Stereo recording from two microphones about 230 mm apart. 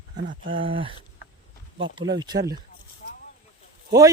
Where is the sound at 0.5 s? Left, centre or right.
Right.